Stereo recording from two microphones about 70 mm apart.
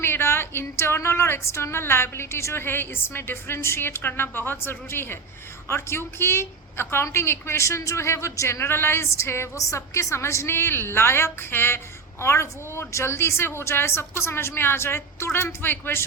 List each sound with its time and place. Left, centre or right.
0.0 s a woman's voice: left